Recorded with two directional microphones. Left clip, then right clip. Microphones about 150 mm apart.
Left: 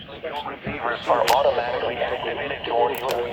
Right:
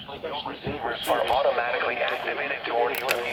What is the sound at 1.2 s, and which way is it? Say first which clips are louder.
Speech: left 4 dB; 35° left (ahead or behind).